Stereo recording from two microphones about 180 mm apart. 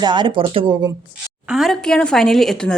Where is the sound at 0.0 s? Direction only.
25° right (ahead or behind).